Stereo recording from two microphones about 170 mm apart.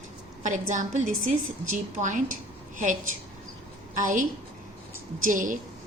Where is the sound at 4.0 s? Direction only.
50° right (ahead or behind).